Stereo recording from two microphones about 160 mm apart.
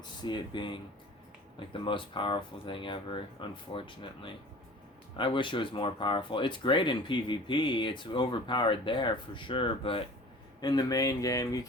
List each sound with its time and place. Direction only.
0.0 s speech: 30° left (ahead or behind)